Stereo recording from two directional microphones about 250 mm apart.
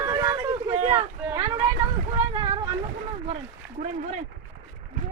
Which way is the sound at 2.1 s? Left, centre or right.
Right.